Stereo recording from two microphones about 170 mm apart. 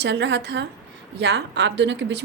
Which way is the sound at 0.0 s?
90° right.